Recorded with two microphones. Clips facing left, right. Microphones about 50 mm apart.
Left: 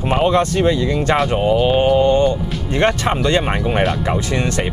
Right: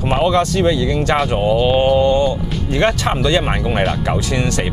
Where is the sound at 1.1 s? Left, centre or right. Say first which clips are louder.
Left 1 dB; centre.